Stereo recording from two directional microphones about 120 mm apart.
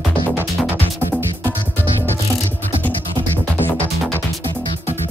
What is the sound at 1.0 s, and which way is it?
Music, 20° right (ahead or behind).